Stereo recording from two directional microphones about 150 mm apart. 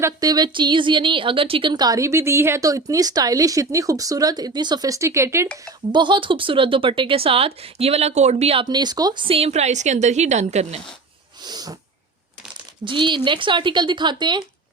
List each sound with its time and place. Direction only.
0.0 s a woman's voice: 25° right (ahead or behind)
5.9 s speech: 30° right (ahead or behind)
8.6 s speech: 30° right (ahead or behind); by 10.8 s 45° right (ahead or behind)
11.4 s sneeze: 25° right (ahead or behind)
12.8 s speech: 30° right (ahead or behind)